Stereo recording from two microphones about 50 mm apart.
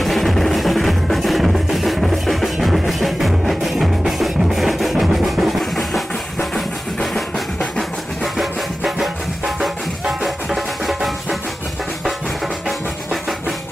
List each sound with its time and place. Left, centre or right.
0.0 s music: centre
8.4 s music: centre
10.2 s music: centre